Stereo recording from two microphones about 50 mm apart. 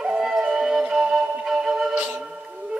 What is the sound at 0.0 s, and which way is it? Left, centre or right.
Music, centre.